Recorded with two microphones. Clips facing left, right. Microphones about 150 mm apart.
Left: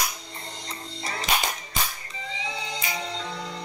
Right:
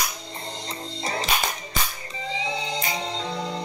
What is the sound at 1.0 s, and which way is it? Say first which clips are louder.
Cap gun: right 5 dB; 25° right (ahead or behind).